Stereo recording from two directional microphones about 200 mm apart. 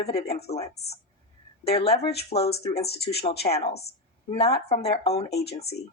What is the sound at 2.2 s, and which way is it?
Speech, 30° left (ahead or behind).